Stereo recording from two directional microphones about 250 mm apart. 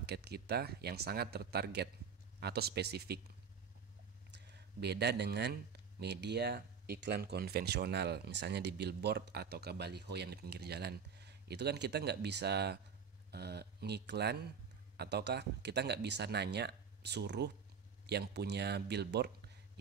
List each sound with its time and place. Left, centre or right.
0.0 s speech: right
4.3 s speech: right